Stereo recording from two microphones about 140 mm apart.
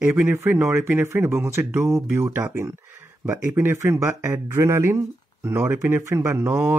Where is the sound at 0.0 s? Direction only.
15° right (ahead or behind).